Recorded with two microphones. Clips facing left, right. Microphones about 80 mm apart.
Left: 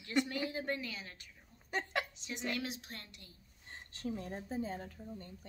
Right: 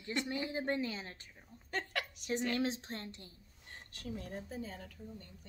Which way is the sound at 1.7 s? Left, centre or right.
Left.